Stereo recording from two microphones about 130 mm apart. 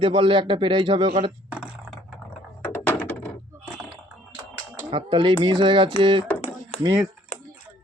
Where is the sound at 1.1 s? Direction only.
60° right (ahead or behind).